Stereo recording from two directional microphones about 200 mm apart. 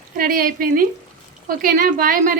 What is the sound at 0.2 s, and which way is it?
A woman's voice, 45° right (ahead or behind).